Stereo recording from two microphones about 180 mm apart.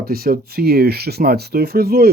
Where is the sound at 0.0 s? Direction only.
55° right (ahead or behind).